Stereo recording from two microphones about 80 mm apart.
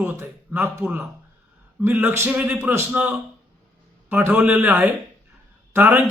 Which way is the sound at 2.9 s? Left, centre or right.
Centre.